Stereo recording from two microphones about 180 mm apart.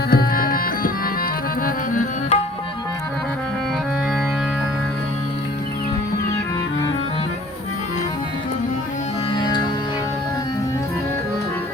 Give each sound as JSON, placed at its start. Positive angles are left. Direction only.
{"t": 0.1, "sound": "tabla", "side_deg": 55}
{"t": 9.3, "sound": "music", "side_deg": 25}